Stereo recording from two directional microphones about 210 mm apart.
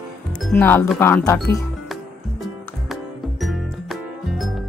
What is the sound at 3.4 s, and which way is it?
Music, centre (ahead or behind).